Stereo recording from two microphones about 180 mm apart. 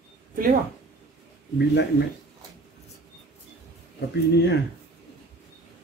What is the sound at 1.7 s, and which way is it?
Speech, 70° left (ahead or behind).